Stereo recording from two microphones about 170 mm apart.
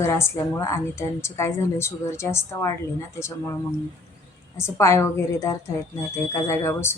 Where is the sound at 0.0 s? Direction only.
15° left (ahead or behind).